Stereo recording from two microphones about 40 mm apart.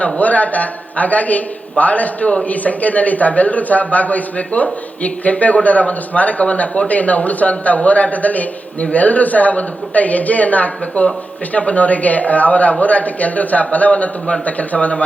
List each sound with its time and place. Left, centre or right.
0.0 s speech: left